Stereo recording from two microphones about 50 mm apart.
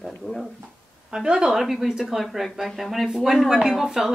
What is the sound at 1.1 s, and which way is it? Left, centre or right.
A woman's voice, centre.